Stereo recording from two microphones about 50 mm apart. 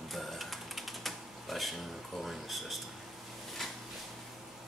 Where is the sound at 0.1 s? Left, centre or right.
Centre.